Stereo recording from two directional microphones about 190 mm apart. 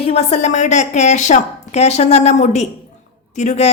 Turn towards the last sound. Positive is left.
turn(degrees=40)  # may be behind; listen again after turning